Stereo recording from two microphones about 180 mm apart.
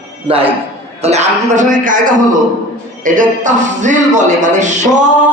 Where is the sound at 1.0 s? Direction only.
40° right (ahead or behind).